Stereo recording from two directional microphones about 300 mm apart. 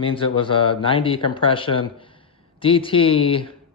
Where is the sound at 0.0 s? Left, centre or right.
Centre.